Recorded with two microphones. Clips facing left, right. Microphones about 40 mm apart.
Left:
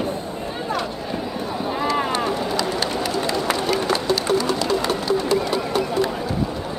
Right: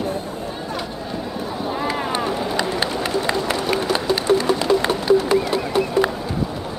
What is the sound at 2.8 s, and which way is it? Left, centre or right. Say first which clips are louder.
Run: right 1 dB; right.